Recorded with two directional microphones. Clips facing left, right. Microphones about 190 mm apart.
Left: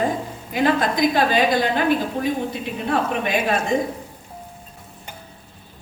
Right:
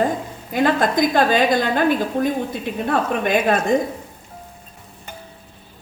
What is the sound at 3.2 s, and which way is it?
Speech, 50° right (ahead or behind).